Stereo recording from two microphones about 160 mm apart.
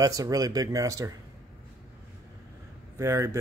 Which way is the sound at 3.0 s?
15° right (ahead or behind).